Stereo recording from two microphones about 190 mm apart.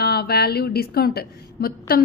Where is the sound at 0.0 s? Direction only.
55° left (ahead or behind).